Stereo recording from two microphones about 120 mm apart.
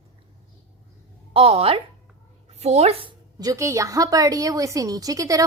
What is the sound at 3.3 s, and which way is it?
A woman's voice, 30° right (ahead or behind).